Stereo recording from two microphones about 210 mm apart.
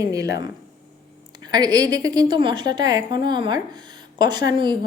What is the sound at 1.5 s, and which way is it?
A woman's voice, 20° right (ahead or behind).